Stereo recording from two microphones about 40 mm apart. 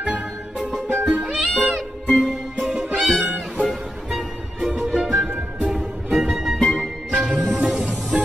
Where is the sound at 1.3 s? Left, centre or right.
Centre.